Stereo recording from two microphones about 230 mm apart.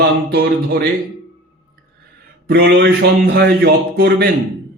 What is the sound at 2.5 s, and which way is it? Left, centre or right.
Speech, right.